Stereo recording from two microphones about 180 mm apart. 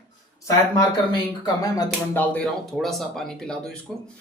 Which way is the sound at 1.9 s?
10° left (ahead or behind).